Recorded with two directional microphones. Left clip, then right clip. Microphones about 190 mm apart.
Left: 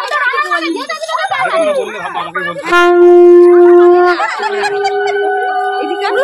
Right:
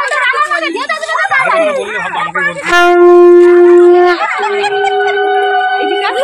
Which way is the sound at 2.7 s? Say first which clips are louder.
Right 1 dB; 10° left (ahead or behind).